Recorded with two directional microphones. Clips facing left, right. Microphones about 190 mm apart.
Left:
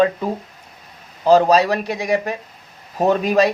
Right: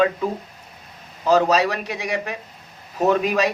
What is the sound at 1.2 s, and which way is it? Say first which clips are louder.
Speech: left 4 dB; 35° left (ahead or behind).